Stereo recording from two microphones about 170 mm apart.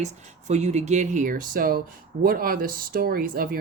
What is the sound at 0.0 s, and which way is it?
Speech, 40° right (ahead or behind).